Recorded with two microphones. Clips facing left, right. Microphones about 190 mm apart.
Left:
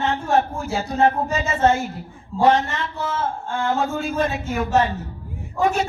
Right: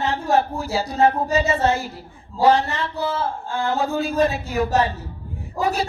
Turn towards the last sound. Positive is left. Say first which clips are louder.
# left 2 dB
turn(degrees=-35)  # may be behind; listen again after turning